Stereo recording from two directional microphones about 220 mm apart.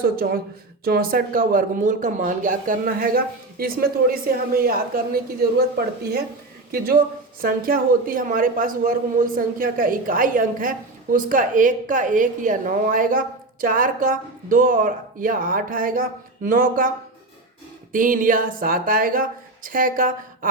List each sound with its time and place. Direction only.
0.0 s a woman's voice: 45° right (ahead or behind)
17.9 s a woman's voice: 40° right (ahead or behind)